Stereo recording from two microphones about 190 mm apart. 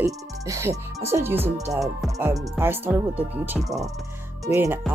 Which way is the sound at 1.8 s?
Centre (ahead or behind).